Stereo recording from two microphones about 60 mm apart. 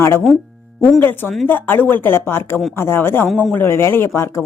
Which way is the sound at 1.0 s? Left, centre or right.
Left.